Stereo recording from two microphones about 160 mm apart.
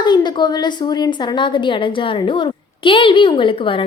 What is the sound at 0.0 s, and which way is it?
A woman's voice, 30° left (ahead or behind).